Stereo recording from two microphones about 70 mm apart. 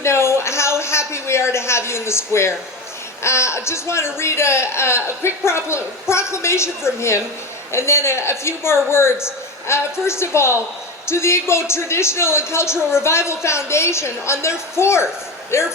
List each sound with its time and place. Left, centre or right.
0.0 s a man's voice: left